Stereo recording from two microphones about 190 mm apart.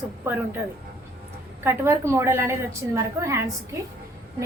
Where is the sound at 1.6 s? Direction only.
15° right (ahead or behind).